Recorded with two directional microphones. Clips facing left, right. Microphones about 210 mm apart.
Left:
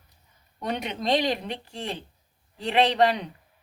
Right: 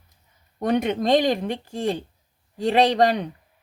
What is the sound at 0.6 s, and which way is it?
Speech, 50° right (ahead or behind).